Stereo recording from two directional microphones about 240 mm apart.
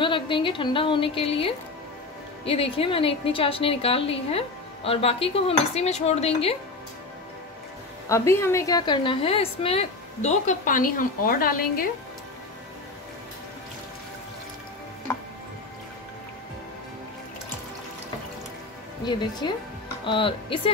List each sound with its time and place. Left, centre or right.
0.0 s a woman's voice: left
8.1 s a woman's voice: centre; by 11.9 s left
19.0 s a woman's voice: centre